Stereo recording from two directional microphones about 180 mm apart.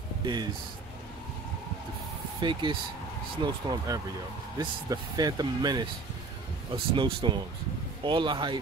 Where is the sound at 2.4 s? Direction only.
25° right (ahead or behind).